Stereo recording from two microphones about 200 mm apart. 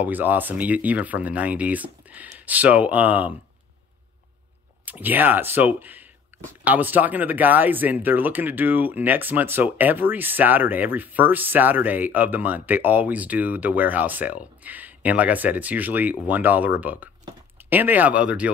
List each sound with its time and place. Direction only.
0.0 s speech: 10° right (ahead or behind)
4.8 s speech: 10° right (ahead or behind)